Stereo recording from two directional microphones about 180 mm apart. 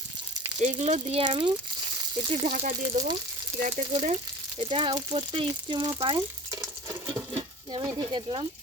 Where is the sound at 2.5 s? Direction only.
50° right (ahead or behind).